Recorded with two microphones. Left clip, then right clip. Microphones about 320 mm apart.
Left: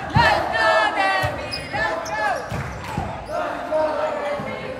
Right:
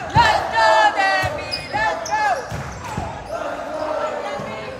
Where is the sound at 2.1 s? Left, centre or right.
Right.